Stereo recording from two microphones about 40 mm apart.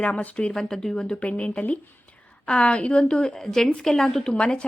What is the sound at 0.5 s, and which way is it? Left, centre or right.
Speech, centre.